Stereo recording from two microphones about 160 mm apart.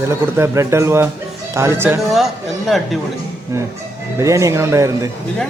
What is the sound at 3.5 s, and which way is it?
Speech, 20° right (ahead or behind).